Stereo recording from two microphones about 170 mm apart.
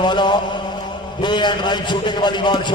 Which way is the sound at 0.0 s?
25° left (ahead or behind).